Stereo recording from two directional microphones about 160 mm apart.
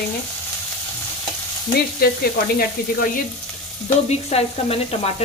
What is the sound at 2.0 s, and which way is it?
Stir, 70° left (ahead or behind).